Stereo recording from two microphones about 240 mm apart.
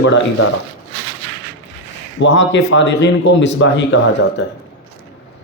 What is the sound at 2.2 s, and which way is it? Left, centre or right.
Speech, left.